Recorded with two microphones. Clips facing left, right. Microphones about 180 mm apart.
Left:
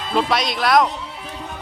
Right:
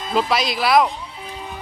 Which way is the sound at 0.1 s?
Centre (ahead or behind).